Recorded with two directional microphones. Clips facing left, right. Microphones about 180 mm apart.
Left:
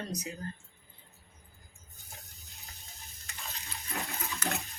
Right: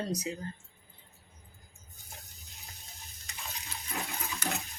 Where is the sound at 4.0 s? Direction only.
Centre (ahead or behind).